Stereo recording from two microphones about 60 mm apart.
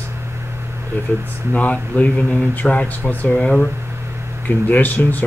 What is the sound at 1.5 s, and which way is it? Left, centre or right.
Speech, left.